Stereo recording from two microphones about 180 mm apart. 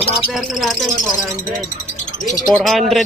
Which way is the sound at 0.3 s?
Centre (ahead or behind).